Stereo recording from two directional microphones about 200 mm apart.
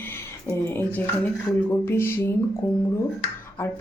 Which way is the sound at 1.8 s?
10° left (ahead or behind).